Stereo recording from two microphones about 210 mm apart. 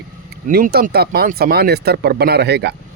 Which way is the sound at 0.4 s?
45° right (ahead or behind).